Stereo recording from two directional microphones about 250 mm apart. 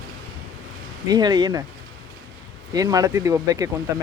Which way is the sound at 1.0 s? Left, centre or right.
Centre.